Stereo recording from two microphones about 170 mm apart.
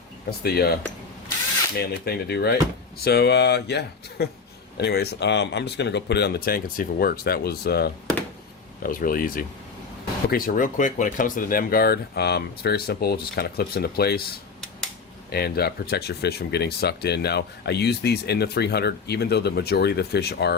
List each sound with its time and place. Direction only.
0.3 s speech: 70° left (ahead or behind)
1.8 s speech: 70° left (ahead or behind)
8.8 s speech: 55° left (ahead or behind)
15.3 s speech: 65° left (ahead or behind)